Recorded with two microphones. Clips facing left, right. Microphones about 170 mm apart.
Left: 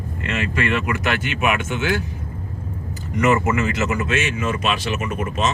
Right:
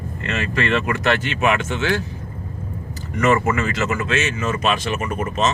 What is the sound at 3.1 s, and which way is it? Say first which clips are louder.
Speech: even; 15° left (ahead or behind).